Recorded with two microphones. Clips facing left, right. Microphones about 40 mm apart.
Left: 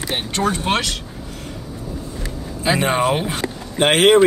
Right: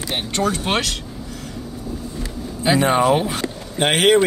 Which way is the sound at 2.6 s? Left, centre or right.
Left.